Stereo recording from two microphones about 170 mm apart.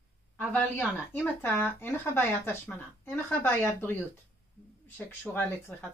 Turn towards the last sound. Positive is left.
turn(degrees=10)  # may be behind; listen again after turning